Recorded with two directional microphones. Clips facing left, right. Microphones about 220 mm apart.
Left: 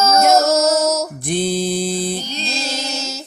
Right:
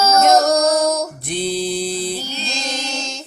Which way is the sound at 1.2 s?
50° left (ahead or behind).